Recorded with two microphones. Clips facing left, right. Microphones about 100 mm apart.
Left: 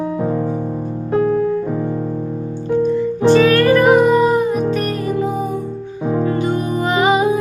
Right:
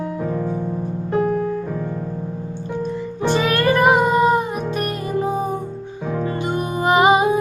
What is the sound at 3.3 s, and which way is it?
Music, 20° right (ahead or behind).